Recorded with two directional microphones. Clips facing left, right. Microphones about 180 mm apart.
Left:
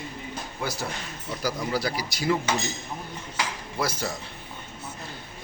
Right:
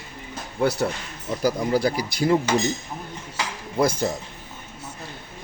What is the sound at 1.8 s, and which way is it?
Speech, 50° right (ahead or behind).